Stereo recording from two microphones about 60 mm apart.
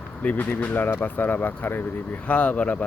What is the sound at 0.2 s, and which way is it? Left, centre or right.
Speech, left.